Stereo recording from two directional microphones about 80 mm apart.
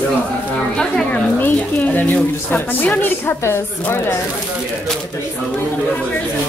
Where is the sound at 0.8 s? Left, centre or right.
Centre.